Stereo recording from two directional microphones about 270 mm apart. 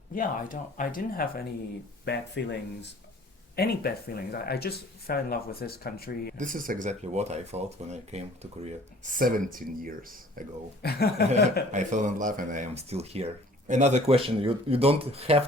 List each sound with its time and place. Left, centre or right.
0.1 s speech: left
6.3 s speech: right
10.8 s speech: left
11.7 s speech: right